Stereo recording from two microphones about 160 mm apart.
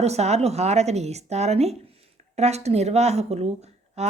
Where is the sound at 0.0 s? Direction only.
40° right (ahead or behind).